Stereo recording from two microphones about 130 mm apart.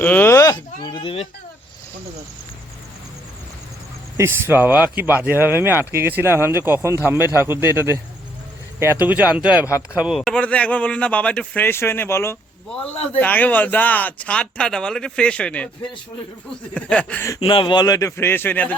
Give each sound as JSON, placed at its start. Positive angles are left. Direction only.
{"t": 0.0, "sound": "speech", "side_deg": 15}
{"t": 0.5, "sound": "speech", "side_deg": 35}
{"t": 4.2, "sound": "speech", "side_deg": -15}
{"t": 12.7, "sound": "speech", "side_deg": 10}
{"t": 16.7, "sound": "speech", "side_deg": 10}
{"t": 17.4, "sound": "speech", "side_deg": 40}